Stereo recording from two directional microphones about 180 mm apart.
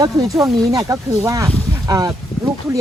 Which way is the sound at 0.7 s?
20° right (ahead or behind).